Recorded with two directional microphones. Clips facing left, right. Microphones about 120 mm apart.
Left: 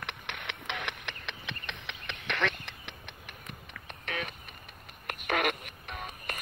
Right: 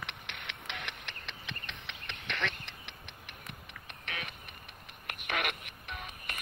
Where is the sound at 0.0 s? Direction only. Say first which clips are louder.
Left 4 dB; 55° left (ahead or behind).